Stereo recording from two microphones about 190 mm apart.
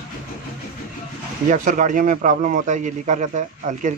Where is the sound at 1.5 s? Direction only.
45° right (ahead or behind).